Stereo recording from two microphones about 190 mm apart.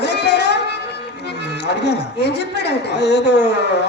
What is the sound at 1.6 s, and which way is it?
Speech, 65° left (ahead or behind).